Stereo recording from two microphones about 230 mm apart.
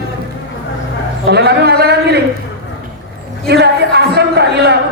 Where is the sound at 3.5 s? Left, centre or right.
Right.